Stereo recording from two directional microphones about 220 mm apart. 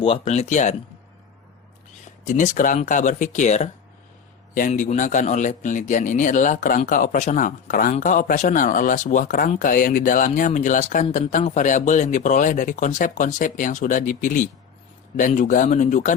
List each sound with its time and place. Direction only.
0.0 s speech: 30° left (ahead or behind)
2.2 s a man's voice: 35° left (ahead or behind)